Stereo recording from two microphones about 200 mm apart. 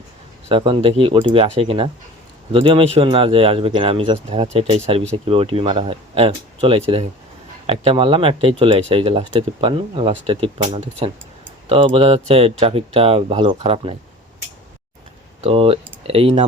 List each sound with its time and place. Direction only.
0.4 s speech: 25° right (ahead or behind)
15.4 s speech: 30° right (ahead or behind)